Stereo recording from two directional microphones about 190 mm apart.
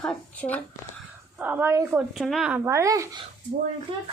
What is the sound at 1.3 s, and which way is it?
A woman's voice, 10° right (ahead or behind).